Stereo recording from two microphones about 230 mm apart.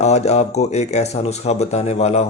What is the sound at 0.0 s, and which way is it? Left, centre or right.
A man's voice, left.